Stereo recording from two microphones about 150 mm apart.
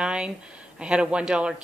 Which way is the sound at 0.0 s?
5° right (ahead or behind).